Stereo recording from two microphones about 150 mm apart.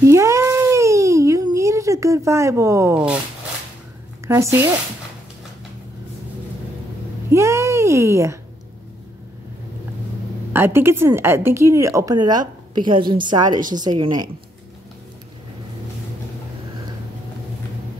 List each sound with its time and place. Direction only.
0.0 s baby cry: 20° right (ahead or behind)
4.3 s speech: 20° right (ahead or behind)
7.2 s a sound: 20° right (ahead or behind)
10.5 s a woman's voice: 15° right (ahead or behind); by 14.3 s 30° right (ahead or behind)